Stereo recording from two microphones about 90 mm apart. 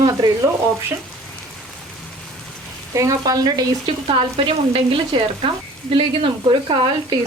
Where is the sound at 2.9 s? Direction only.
40° right (ahead or behind).